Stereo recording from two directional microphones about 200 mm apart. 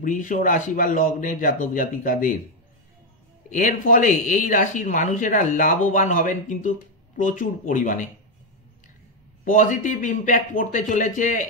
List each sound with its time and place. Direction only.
0.0 s speech: 40° left (ahead or behind)
3.4 s speech: 40° left (ahead or behind)
9.4 s speech: 40° left (ahead or behind)